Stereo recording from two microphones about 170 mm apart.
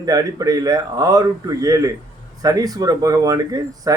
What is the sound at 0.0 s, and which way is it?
Speech, 20° right (ahead or behind).